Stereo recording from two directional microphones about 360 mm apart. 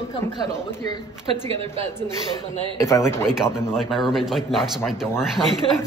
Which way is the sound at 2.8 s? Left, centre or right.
Centre.